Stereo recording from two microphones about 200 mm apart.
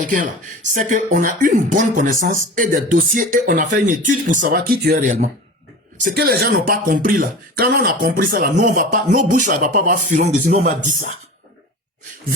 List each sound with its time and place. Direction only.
0.0 s speech: 40° right (ahead or behind)